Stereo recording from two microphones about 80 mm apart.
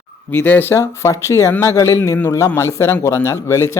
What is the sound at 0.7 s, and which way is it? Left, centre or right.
Speech, left.